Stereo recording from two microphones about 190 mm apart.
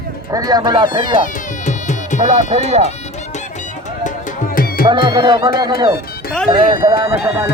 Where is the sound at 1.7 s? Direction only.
40° left (ahead or behind).